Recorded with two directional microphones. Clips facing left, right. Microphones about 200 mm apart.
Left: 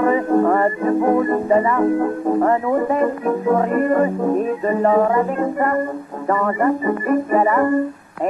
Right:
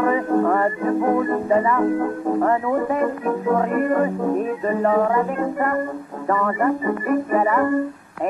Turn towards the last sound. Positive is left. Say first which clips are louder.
# left 3 dB
turn(degrees=35)  # may be behind; listen again after turning